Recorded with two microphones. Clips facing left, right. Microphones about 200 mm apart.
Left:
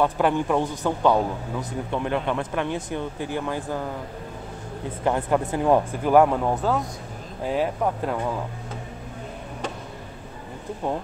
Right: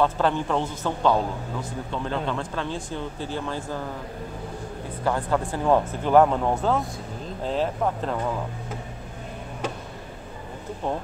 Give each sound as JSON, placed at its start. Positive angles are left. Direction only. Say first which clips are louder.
{"t": 0.0, "sound": "a man's voice", "louder": "left 1 dB", "side_deg": 15}
{"t": 5.0, "sound": "a man's voice", "louder": "left 2 dB", "side_deg": 20}
{"t": 7.4, "sound": "a man's voice", "louder": "left 1 dB", "side_deg": 10}